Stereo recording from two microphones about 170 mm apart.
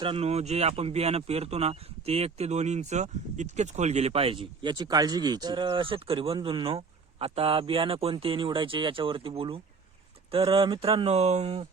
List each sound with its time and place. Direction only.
0.0 s speech: 35° right (ahead or behind)